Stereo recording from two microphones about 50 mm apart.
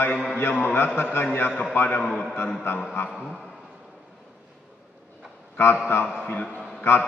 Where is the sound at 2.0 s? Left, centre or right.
Centre.